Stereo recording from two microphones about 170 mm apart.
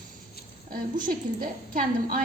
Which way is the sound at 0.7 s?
55° right (ahead or behind).